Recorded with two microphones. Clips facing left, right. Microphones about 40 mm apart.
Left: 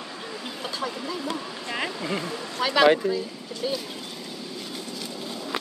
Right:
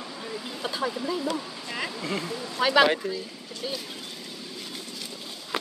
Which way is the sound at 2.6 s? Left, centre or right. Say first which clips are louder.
Even; centre.